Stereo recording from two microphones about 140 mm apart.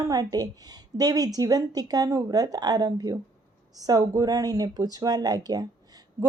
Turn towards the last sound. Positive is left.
turn(degrees=-25)  # may be behind; listen again after turning